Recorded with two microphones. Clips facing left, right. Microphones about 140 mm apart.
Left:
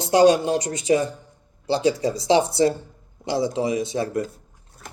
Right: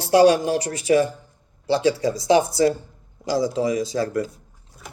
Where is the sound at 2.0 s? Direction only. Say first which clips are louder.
Right 1 dB; 30° left (ahead or behind).